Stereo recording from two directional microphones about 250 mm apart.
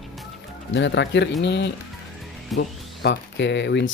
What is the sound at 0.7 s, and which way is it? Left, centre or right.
Speech, left.